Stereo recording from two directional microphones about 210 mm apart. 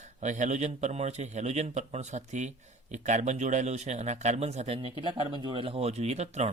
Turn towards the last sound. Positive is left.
turn(degrees=-30)  # may be behind; listen again after turning